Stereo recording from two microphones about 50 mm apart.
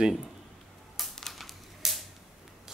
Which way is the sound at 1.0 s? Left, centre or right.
Centre.